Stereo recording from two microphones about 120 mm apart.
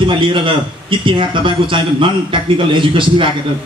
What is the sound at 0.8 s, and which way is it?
A man's voice, 45° right (ahead or behind).